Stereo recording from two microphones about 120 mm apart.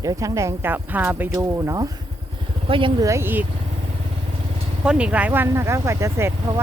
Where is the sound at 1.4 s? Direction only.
30° right (ahead or behind).